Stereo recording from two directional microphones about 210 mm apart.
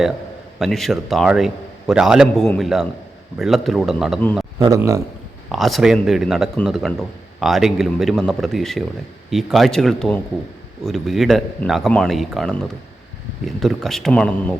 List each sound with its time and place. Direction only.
0.6 s speech: centre (ahead or behind)
4.6 s speech: 15° right (ahead or behind)
5.5 s speech: centre (ahead or behind)